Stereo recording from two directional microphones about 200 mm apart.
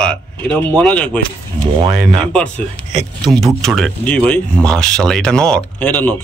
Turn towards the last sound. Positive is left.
turn(degrees=10)  # may be behind; listen again after turning